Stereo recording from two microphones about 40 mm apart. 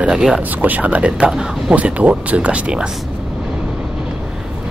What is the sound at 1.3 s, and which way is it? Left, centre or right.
Speech, centre.